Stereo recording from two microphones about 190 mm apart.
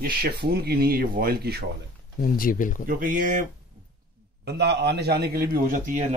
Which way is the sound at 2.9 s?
45° right (ahead or behind).